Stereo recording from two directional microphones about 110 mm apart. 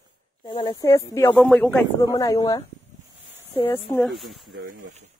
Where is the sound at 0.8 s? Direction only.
30° left (ahead or behind).